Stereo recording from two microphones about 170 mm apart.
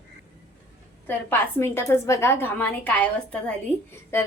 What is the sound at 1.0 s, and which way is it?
A woman's voice, 15° left (ahead or behind).